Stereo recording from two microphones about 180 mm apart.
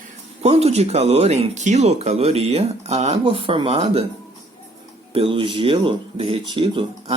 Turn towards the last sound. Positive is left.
turn(degrees=-30)  # may be behind; listen again after turning